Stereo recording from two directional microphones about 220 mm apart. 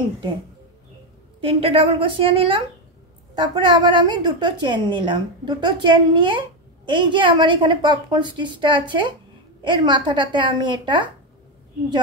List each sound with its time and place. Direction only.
1.4 s a woman's voice: 25° right (ahead or behind)